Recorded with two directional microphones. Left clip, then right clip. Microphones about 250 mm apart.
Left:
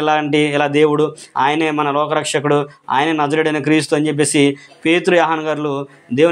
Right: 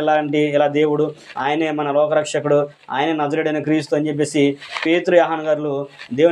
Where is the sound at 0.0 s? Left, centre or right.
Left.